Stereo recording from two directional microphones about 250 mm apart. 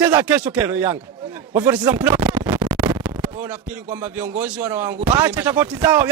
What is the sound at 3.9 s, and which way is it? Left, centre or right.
A man's voice, centre.